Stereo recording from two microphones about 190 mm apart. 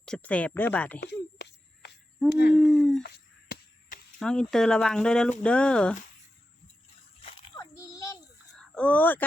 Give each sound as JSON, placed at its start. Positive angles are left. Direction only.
{"t": 0.0, "sound": "speech", "side_deg": 5}
{"t": 1.0, "sound": "a sound", "side_deg": 65}
{"t": 2.3, "sound": "speech", "side_deg": 60}
{"t": 2.6, "sound": "speech", "side_deg": 0}
{"t": 3.5, "sound": "a sound", "side_deg": 50}
{"t": 4.2, "sound": "speech", "side_deg": 5}
{"t": 7.5, "sound": "child singing", "side_deg": 15}
{"t": 8.5, "sound": "speech", "side_deg": 5}